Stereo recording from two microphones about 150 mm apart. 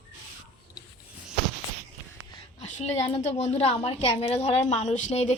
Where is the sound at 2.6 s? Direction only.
45° left (ahead or behind).